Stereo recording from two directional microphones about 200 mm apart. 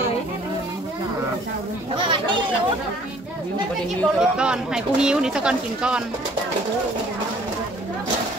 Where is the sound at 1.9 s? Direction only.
25° right (ahead or behind).